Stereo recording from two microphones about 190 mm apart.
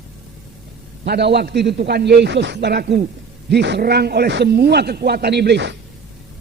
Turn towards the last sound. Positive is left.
turn(degrees=-65)  # may be behind; listen again after turning